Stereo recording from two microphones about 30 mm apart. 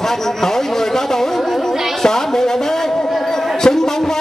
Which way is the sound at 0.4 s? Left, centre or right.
Centre.